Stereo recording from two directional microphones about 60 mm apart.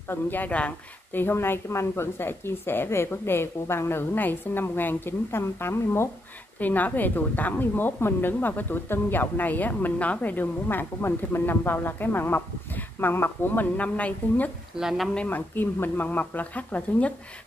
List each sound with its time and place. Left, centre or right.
0.1 s speech: left
1.1 s a woman's voice: left
6.6 s a woman's voice: left
13.7 s speech: left
14.8 s speech: centre
15.2 s a woman's voice: left